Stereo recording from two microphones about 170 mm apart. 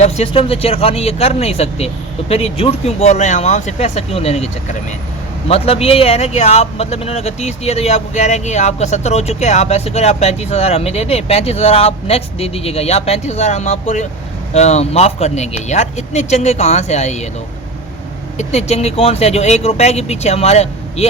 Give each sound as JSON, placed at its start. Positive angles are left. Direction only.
{"t": 0.0, "sound": "a man's voice", "side_deg": 35}
{"t": 5.5, "sound": "a man's voice", "side_deg": 35}
{"t": 18.3, "sound": "a man's voice", "side_deg": 40}